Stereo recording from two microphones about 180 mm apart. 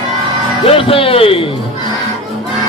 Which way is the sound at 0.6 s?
30° left (ahead or behind).